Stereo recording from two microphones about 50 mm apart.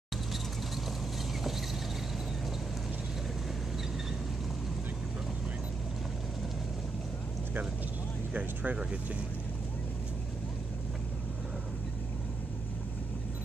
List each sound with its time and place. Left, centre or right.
8.3 s vehicle: right